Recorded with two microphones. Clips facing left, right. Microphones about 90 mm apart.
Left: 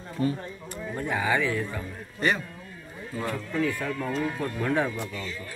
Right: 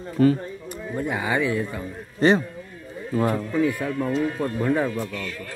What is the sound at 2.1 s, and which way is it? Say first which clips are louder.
Speech: right 8 dB; 30° right (ahead or behind).